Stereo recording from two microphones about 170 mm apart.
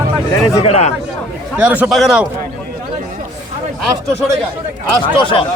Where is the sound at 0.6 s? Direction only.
40° left (ahead or behind).